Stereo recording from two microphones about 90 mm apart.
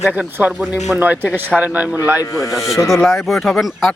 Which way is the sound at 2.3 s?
40° left (ahead or behind).